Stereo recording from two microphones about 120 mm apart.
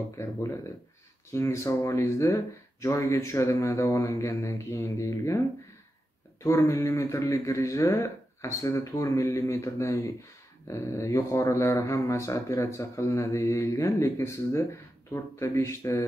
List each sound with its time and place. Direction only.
0.2 s speech: 20° left (ahead or behind)
6.4 s speech: 25° left (ahead or behind)